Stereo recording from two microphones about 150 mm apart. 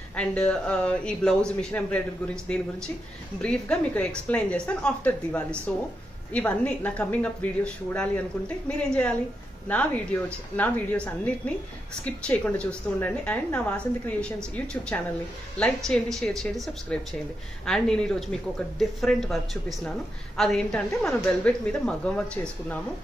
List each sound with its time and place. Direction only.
0.1 s a woman's voice: 10° left (ahead or behind)